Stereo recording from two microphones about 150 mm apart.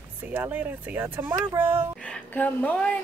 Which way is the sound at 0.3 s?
10° right (ahead or behind).